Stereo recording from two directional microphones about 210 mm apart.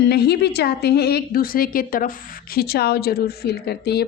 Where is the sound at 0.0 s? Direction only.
50° left (ahead or behind).